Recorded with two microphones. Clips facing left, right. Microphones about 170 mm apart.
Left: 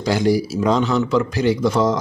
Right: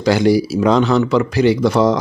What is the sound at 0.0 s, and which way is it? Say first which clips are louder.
Speech: right 4 dB; 75° right (ahead or behind).